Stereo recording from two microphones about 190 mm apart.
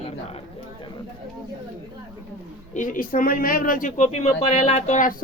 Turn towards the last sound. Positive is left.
turn(degrees=40)  # may be behind; listen again after turning